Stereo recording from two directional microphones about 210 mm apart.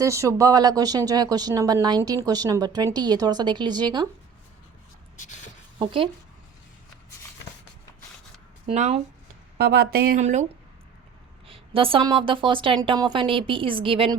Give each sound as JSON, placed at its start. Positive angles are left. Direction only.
{"t": 0.0, "sound": "a woman's voice", "side_deg": -15}
{"t": 5.8, "sound": "a woman's voice", "side_deg": -25}
{"t": 8.6, "sound": "speech", "side_deg": -30}
{"t": 9.6, "sound": "speech", "side_deg": -50}
{"t": 11.4, "sound": "a woman's voice", "side_deg": -25}